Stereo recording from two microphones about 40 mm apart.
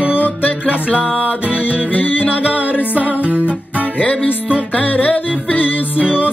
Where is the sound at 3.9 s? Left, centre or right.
Left.